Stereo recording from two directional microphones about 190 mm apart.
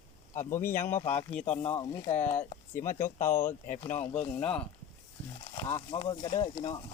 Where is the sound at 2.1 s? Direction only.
40° left (ahead or behind).